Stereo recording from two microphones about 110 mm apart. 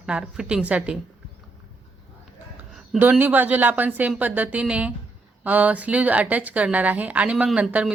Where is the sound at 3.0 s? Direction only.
15° right (ahead or behind).